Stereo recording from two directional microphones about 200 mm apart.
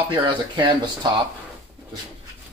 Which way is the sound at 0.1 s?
25° right (ahead or behind).